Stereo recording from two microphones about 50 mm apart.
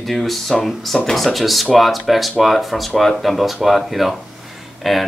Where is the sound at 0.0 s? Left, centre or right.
Centre.